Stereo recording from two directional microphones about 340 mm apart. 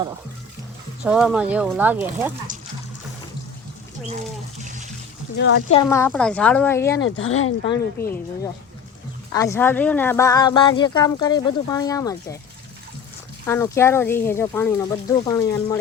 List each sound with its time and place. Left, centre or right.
1.0 s speech: centre
4.5 s water: right
5.4 s speech: left
5.7 s speech: centre
7.0 s speech: left
7.6 s speech: centre
9.3 s speech: centre
13.5 s speech: centre